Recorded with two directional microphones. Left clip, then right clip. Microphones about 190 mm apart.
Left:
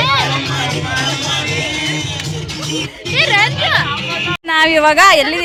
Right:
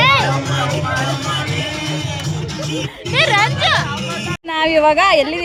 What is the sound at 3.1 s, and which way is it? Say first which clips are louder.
Music: left 1 dB; 20° right (ahead or behind).